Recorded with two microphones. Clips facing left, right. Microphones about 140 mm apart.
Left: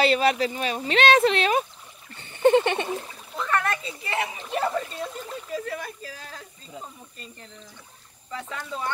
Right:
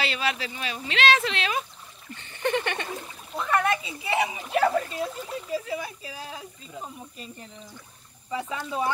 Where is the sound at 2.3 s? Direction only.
25° left (ahead or behind).